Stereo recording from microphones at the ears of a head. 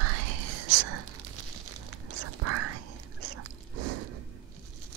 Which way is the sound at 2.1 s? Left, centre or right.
Right.